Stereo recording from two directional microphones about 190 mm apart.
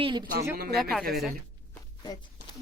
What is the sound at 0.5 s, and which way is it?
Speech, 55° right (ahead or behind).